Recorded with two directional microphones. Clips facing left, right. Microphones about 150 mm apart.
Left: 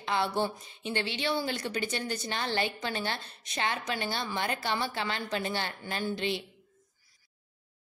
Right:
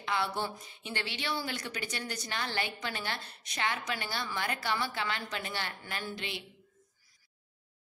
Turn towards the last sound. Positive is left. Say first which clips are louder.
# left 7 dB
turn(degrees=30)  # may be behind; listen again after turning